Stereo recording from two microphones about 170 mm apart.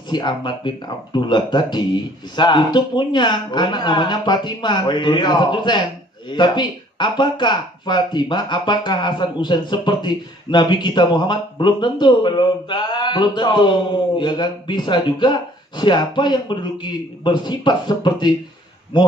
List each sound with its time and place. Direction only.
0.1 s speech: 25° left (ahead or behind)